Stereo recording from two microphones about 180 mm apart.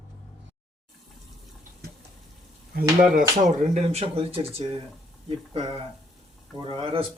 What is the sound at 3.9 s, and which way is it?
Speech, 35° right (ahead or behind).